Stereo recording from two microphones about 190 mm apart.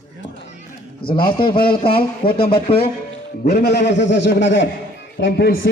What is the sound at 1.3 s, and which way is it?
A man's voice, 25° left (ahead or behind).